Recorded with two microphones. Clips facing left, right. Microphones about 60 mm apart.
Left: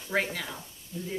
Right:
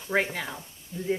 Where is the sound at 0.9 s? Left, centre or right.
Right.